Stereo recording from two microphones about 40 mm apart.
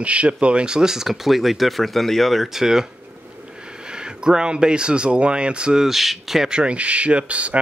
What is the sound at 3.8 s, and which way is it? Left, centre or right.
Speech, right.